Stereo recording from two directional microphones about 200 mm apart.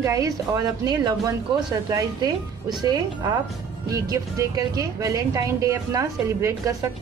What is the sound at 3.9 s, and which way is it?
Speech, 15° right (ahead or behind).